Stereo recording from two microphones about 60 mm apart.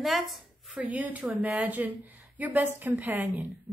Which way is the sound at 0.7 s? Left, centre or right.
Right.